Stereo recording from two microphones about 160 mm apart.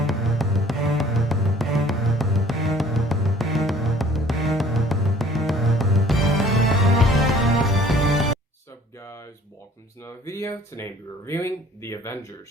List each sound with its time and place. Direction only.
0.0 s music: centre (ahead or behind)
9.0 s a sound: 20° left (ahead or behind)
10.0 s speech: 20° left (ahead or behind)